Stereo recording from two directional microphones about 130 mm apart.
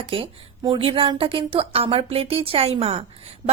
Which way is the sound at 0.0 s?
45° right (ahead or behind).